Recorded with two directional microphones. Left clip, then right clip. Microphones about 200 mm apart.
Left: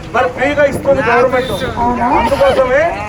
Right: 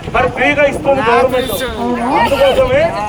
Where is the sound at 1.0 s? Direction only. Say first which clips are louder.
Right 1 dB; 60° right (ahead or behind).